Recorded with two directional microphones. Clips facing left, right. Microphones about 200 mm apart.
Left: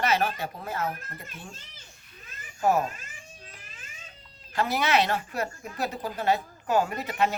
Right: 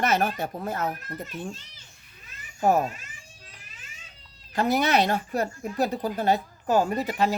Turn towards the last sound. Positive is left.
turn(degrees=-35)  # may be behind; listen again after turning